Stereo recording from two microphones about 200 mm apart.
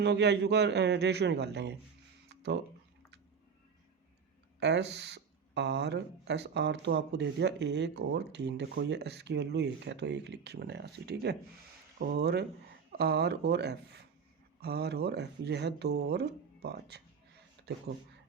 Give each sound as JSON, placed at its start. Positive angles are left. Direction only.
{"t": 0.0, "sound": "speech", "side_deg": -60}
{"t": 2.3, "sound": "a sound", "side_deg": -55}
{"t": 4.6, "sound": "speech", "side_deg": -60}